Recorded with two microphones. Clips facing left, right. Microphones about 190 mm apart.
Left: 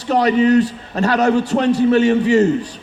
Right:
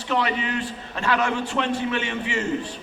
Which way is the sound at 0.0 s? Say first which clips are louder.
Left 10 dB; 40° left (ahead or behind).